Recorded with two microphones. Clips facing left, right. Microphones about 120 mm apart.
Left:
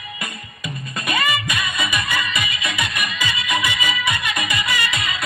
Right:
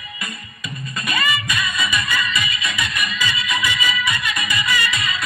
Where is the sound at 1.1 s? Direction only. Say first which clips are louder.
Left 1 dB; 55° left (ahead or behind).